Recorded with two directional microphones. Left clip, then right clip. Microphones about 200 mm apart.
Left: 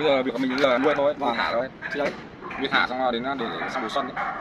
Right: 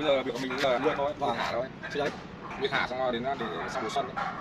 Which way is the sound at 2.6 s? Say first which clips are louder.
Left 6 dB; 10° right (ahead or behind).